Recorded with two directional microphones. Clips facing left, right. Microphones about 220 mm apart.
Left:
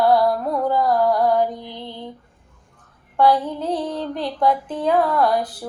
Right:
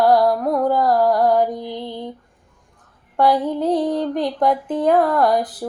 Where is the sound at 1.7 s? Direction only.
20° right (ahead or behind).